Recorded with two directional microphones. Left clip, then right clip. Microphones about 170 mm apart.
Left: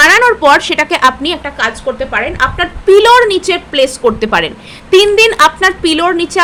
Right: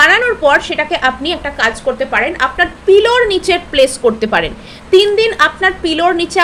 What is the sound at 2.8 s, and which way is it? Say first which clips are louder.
A woman's voice: left 5 dB; 25° left (ahead or behind).